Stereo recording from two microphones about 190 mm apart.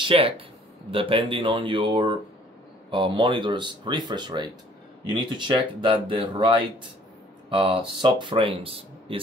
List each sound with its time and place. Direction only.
0.1 s speech: 30° right (ahead or behind)